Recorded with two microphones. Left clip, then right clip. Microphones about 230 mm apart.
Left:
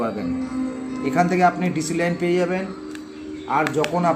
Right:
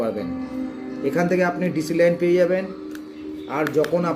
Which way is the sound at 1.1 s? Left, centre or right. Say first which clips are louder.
Left 3 dB; centre.